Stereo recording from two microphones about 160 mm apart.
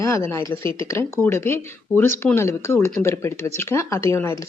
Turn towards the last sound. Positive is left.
turn(degrees=15)  # may be behind; listen again after turning